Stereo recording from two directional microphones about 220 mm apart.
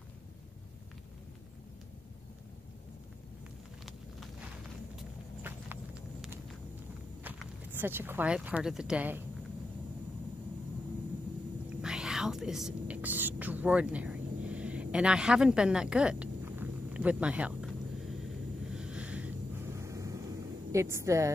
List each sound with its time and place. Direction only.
5.4 s horse: 5° right (ahead or behind)
7.2 s speech: 10° right (ahead or behind)
11.8 s whispering: centre (ahead or behind)
18.7 s vehicle: 5° right (ahead or behind)
20.7 s a woman's voice: 15° right (ahead or behind)